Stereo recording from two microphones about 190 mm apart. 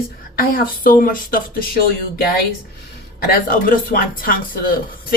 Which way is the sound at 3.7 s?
45° left (ahead or behind).